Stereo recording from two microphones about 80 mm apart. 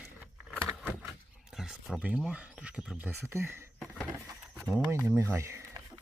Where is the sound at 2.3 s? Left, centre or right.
Centre.